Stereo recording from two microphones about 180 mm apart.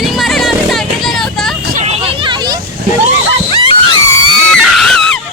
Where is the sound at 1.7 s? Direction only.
35° right (ahead or behind).